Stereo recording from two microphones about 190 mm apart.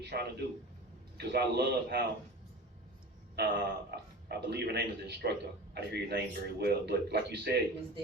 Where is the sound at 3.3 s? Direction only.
60° right (ahead or behind).